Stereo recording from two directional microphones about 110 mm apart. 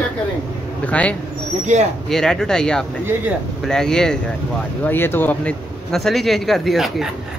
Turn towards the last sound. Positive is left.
turn(degrees=0)  # may be behind; listen again after turning